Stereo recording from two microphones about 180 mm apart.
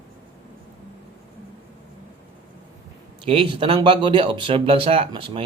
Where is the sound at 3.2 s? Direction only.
30° right (ahead or behind).